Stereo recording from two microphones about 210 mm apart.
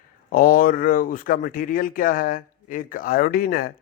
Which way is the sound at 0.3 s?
40° left (ahead or behind).